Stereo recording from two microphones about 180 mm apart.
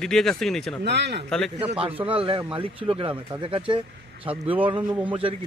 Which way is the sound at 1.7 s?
30° right (ahead or behind).